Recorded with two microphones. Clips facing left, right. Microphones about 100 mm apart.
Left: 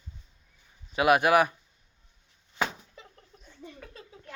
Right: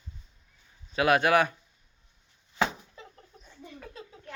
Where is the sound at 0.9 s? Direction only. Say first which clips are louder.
Left 1 dB; 15° left (ahead or behind).